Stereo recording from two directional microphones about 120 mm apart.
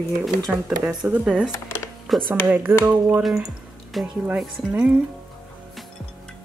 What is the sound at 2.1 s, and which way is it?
Speech, centre (ahead or behind).